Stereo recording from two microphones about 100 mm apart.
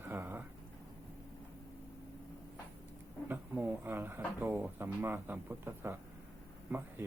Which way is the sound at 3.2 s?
20° right (ahead or behind).